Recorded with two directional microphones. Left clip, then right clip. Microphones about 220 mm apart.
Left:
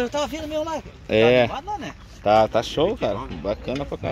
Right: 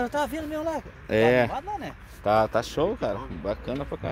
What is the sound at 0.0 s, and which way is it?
Speech, 30° right (ahead or behind).